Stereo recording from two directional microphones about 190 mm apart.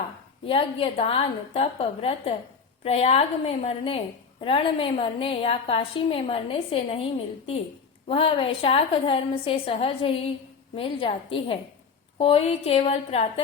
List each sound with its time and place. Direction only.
0.4 s a woman's voice: 30° left (ahead or behind)
8.0 s a woman's voice: 30° left (ahead or behind)